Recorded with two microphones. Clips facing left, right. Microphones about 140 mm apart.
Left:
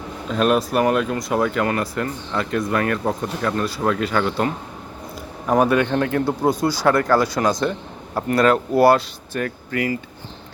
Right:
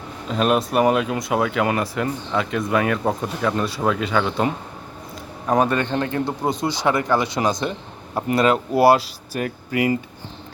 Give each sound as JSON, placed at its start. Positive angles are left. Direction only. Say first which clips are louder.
{"t": 0.3, "sound": "speech", "louder": "left 1 dB", "side_deg": 0}
{"t": 5.5, "sound": "speech", "louder": "left 2 dB", "side_deg": 5}
{"t": 6.7, "sound": "speech", "louder": "left 1 dB", "side_deg": -15}
{"t": 8.1, "sound": "speech", "louder": "left 1 dB", "side_deg": -5}